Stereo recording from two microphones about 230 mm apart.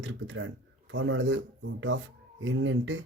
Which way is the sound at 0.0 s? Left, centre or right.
Right.